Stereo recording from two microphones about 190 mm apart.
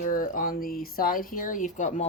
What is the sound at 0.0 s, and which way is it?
Speech, 45° left (ahead or behind).